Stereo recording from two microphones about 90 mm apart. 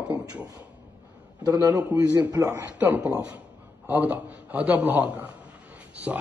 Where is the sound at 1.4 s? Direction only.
40° right (ahead or behind).